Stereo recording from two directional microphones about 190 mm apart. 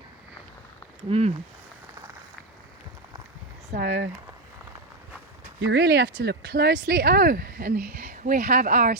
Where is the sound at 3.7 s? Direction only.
55° right (ahead or behind).